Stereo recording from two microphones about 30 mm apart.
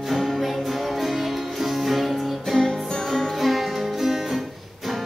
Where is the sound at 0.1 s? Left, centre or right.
Centre.